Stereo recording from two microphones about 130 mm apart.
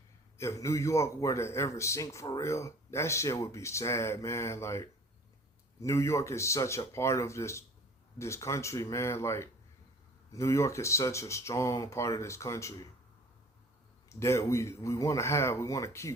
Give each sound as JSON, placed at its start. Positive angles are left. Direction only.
{"t": 0.3, "sound": "speech", "side_deg": 20}
{"t": 14.1, "sound": "speech", "side_deg": 20}